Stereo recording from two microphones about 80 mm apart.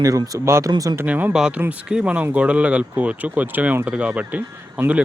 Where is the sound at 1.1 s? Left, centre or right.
Right.